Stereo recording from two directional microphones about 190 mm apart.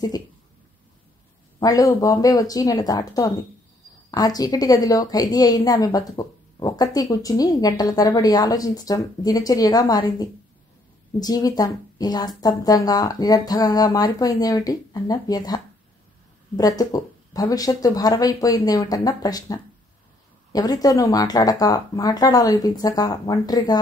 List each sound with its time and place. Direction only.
1.6 s a woman's voice: 20° left (ahead or behind)